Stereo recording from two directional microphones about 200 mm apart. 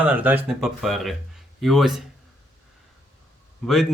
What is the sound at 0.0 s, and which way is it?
Speech, 10° right (ahead or behind).